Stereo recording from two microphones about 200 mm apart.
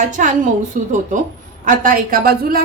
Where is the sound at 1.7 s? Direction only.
45° right (ahead or behind).